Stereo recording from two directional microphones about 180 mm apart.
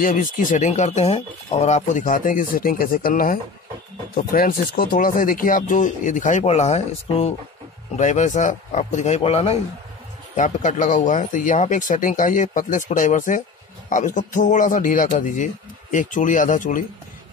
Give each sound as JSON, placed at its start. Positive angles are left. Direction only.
{"t": 0.0, "sound": "speech", "side_deg": 50}